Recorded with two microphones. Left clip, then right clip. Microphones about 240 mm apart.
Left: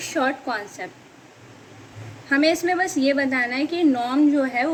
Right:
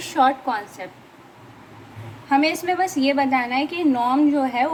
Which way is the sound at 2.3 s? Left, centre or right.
Right.